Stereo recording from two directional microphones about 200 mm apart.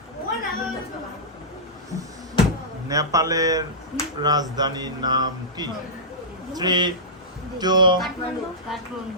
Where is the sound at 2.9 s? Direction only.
15° right (ahead or behind).